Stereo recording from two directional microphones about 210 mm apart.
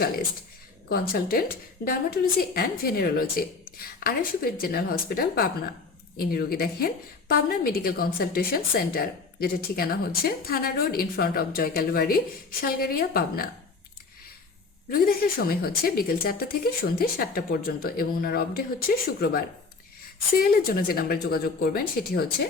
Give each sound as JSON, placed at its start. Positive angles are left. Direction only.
{"t": 0.9, "sound": "a woman's voice", "side_deg": 45}
{"t": 14.8, "sound": "a woman's voice", "side_deg": 45}